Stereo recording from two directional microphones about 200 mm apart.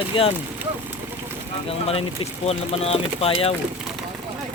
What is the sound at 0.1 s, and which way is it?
Speech, 30° left (ahead or behind).